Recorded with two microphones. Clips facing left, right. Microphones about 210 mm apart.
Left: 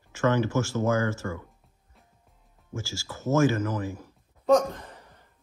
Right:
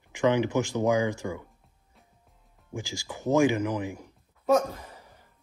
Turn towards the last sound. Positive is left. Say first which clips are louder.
# left 1 dB
turn(degrees=-10)  # may be behind; listen again after turning